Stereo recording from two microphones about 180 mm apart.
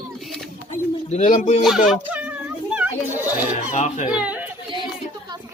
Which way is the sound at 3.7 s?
40° left (ahead or behind).